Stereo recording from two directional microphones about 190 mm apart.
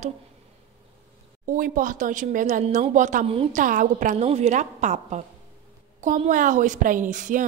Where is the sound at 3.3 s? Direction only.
30° right (ahead or behind).